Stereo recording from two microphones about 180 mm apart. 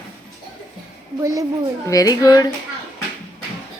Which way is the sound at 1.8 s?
20° left (ahead or behind).